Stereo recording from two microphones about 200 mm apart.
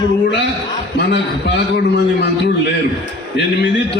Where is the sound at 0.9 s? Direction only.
60° left (ahead or behind).